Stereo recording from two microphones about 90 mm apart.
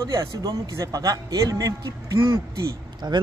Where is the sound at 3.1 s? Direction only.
60° right (ahead or behind).